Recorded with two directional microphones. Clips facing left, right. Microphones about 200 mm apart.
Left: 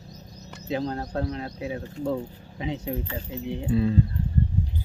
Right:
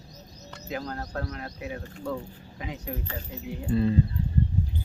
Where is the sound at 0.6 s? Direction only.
25° left (ahead or behind).